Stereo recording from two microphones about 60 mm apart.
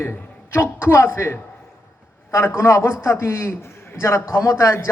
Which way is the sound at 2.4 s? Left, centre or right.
Left.